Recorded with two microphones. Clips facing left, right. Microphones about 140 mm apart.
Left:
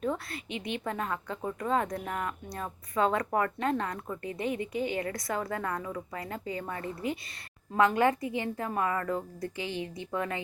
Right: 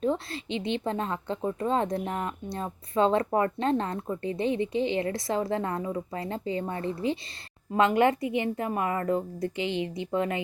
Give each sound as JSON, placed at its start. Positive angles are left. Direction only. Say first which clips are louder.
{"t": 0.0, "sound": "a woman's voice", "louder": "right 5 dB", "side_deg": -25}